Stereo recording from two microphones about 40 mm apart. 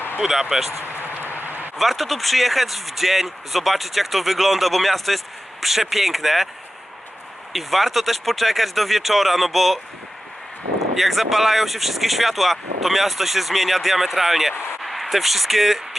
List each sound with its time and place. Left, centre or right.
0.2 s speech: centre
0.9 s a sound: right
1.8 s speech: centre
7.5 s speech: centre
10.9 s speech: centre